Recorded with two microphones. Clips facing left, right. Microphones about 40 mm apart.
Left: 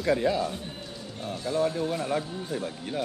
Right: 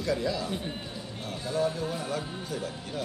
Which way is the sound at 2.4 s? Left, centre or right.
Left.